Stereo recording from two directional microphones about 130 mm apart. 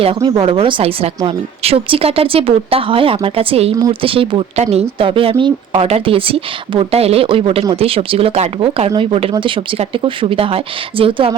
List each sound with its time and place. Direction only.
0.2 s speech: 35° right (ahead or behind)